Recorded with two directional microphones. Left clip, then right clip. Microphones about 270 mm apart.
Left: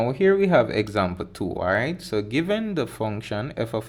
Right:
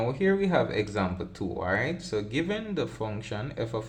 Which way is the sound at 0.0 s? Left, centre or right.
Left.